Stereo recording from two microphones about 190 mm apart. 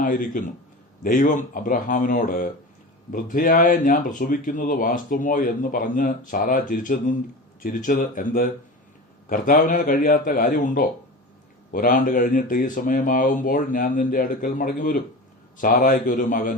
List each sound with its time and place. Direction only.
0.0 s speech: 45° left (ahead or behind)